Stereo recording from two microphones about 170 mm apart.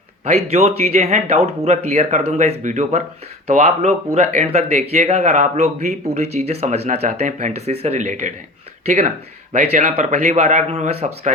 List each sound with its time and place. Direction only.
0.3 s speech: 35° right (ahead or behind)